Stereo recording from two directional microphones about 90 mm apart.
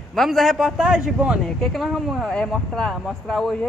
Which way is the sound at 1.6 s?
Centre (ahead or behind).